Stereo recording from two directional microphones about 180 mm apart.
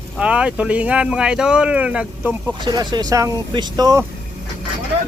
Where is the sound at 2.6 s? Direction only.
25° right (ahead or behind).